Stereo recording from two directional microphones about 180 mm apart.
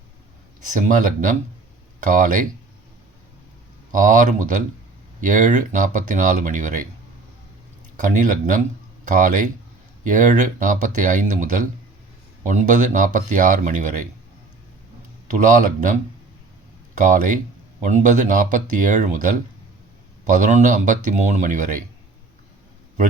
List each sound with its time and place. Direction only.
0.6 s speech: 45° right (ahead or behind)
3.9 s speech: 45° right (ahead or behind)
8.0 s speech: 45° right (ahead or behind)
15.4 s speech: 45° right (ahead or behind)
17.0 s speech: 45° right (ahead or behind)